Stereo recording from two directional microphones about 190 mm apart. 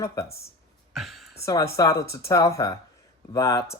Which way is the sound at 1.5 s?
15° left (ahead or behind).